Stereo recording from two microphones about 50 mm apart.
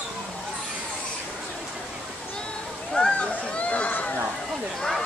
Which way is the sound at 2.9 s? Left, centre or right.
Centre.